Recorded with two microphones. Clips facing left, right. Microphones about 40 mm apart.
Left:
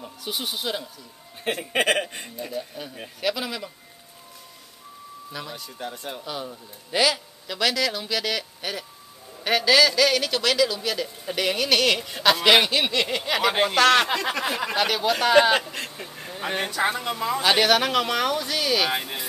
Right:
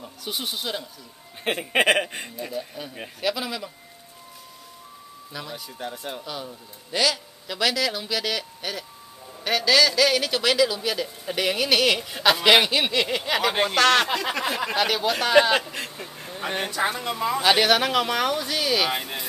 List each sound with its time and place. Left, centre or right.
0.0 s speech: centre
1.4 s speech: right
2.3 s a man's voice: centre
5.3 s a man's voice: centre
7.4 s a man's voice: centre